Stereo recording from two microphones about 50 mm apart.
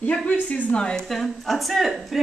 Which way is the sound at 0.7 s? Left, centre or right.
Centre.